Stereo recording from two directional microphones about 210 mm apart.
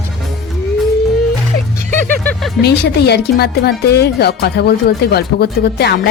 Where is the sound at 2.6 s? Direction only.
50° left (ahead or behind).